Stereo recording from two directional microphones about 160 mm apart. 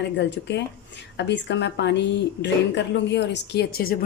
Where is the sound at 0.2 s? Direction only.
90° left.